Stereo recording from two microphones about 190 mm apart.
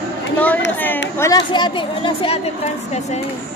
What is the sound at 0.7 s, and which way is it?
Speech, 10° left (ahead or behind).